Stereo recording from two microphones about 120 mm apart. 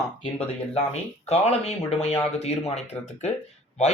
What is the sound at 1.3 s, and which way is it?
Speech, 60° left (ahead or behind).